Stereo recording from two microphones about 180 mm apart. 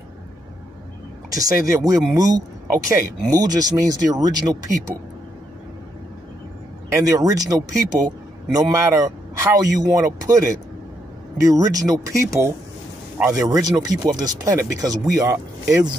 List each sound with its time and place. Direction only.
1.3 s speech: 20° right (ahead or behind)
6.9 s speech: 20° right (ahead or behind)